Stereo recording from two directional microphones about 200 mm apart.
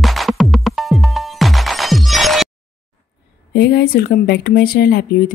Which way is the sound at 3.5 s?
55° left (ahead or behind).